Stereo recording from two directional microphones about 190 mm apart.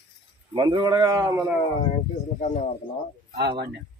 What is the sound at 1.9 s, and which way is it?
Speech, 35° left (ahead or behind).